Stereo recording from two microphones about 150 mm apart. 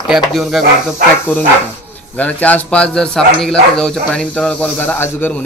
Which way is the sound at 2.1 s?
10° left (ahead or behind).